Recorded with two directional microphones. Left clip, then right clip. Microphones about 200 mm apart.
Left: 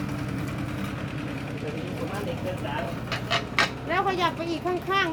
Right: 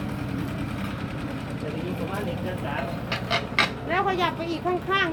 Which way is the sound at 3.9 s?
25° left (ahead or behind).